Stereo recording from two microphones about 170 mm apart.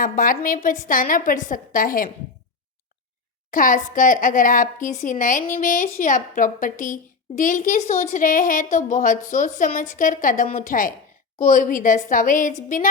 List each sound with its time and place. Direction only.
0.0 s a woman's voice: 55° left (ahead or behind)
3.5 s a woman's voice: 50° left (ahead or behind)